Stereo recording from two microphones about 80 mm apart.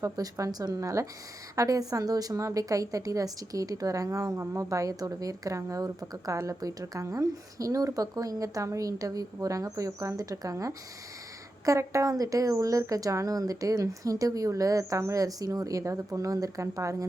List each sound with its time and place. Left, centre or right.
0.0 s a woman's voice: right